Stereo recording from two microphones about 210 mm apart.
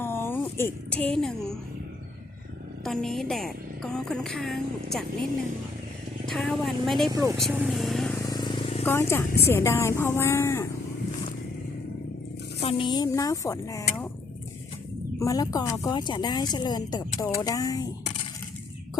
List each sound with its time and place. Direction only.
0.0 s a sound: 10° left (ahead or behind)
2.8 s a woman's voice: centre (ahead or behind)
6.2 s a woman's voice: centre (ahead or behind)
7.1 s speech: 15° right (ahead or behind)
7.3 s a woman's voice: 5° right (ahead or behind)
8.2 s vehicle: 20° left (ahead or behind)
8.8 s a woman's voice: 10° left (ahead or behind)
12.5 s a woman's voice: 25° left (ahead or behind)
15.2 s a woman's voice: 15° left (ahead or behind)